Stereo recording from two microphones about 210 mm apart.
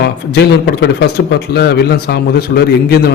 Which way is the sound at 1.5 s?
50° left (ahead or behind).